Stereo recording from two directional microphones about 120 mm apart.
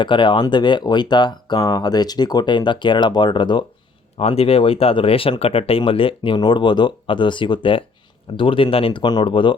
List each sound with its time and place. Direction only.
0.0 s speech: 40° left (ahead or behind)
4.2 s speech: 55° left (ahead or behind)